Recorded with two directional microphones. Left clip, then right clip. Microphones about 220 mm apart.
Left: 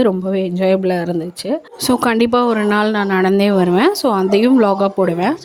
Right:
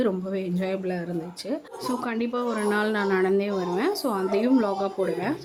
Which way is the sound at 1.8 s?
45° left (ahead or behind).